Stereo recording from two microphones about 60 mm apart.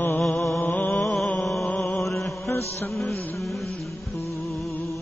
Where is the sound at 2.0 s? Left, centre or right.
Left.